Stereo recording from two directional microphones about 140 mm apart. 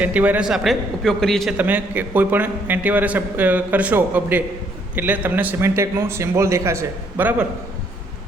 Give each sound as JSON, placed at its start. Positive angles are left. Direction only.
{"t": 0.0, "sound": "a man's voice", "side_deg": -10}
{"t": 1.5, "sound": "a man's voice", "side_deg": -10}